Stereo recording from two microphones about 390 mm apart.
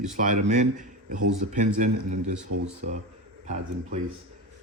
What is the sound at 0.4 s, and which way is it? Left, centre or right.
Speech, centre.